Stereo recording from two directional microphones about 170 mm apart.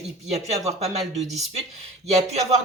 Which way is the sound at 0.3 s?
40° right (ahead or behind).